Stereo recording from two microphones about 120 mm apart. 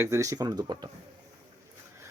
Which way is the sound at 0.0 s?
25° right (ahead or behind).